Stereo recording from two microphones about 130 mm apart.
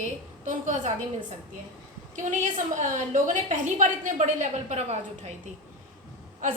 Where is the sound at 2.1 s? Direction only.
75° right (ahead or behind).